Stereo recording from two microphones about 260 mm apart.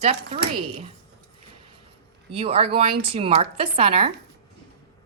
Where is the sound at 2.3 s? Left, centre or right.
Right.